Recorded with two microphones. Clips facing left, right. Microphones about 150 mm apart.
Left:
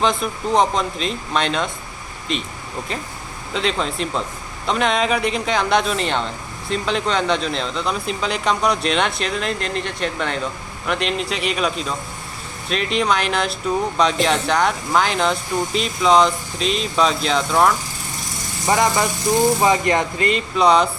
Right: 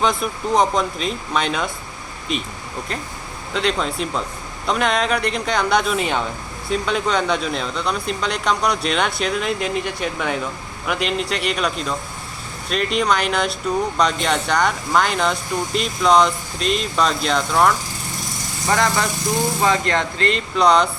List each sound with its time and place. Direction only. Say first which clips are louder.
0.0 s speech: even; centre (ahead or behind)
3.5 s speech: right 1 dB; centre (ahead or behind)
18.7 s speech: left 2 dB; 15° left (ahead or behind)